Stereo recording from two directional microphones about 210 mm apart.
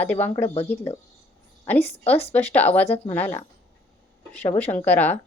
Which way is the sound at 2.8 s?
30° left (ahead or behind).